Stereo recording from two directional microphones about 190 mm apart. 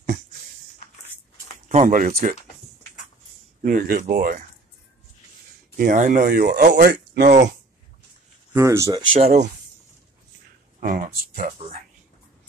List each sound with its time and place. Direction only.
1.7 s speech: 40° right (ahead or behind)
3.6 s speech: 45° right (ahead or behind)
5.8 s speech: 40° right (ahead or behind)
8.5 s speech: 15° right (ahead or behind)
10.8 s speech: 45° right (ahead or behind)
11.6 s speech: 35° right (ahead or behind)